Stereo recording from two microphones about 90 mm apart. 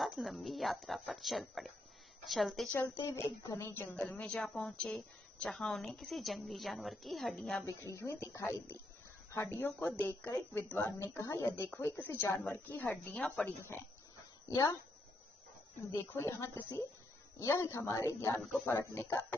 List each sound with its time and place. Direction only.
0.4 s a woman's voice: centre (ahead or behind)
2.7 s a woman's voice: 20° left (ahead or behind)
3.1 s a woman's voice: 30° left (ahead or behind)
4.1 s a woman's voice: 15° left (ahead or behind)
7.6 s a woman's voice: 35° left (ahead or behind); by 13.5 s 10° left (ahead or behind)
14.5 s speech: 45° left (ahead or behind)
16.0 s a woman's voice: 30° left (ahead or behind)
18.9 s speech: 15° left (ahead or behind)